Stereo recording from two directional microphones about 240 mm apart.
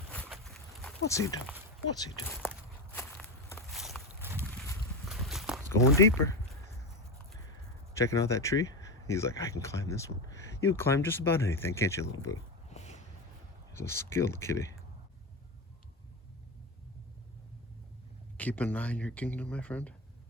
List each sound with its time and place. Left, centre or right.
0.1 s a sound: centre
1.1 s speech: centre
2.0 s walk: centre
3.7 s walk: centre
4.4 s boat: centre
5.0 s walk: centre
6.0 s speech: centre
7.9 s speech: centre
12.7 s a sound: left
13.7 s speech: centre
18.3 s speech: centre